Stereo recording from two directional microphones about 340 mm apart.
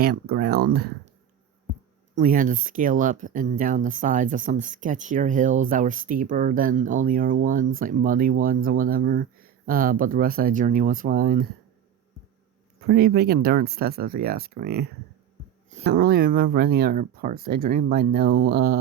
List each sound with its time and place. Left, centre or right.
0.0 s speech: right
2.1 s speech: right
12.9 s speech: right